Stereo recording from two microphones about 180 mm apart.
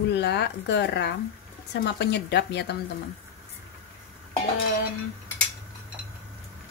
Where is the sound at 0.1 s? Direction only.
70° left (ahead or behind).